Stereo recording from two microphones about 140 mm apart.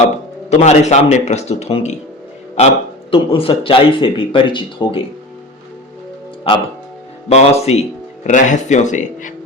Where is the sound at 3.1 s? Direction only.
40° left (ahead or behind).